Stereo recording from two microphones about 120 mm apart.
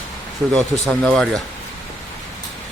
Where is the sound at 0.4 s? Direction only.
Centre (ahead or behind).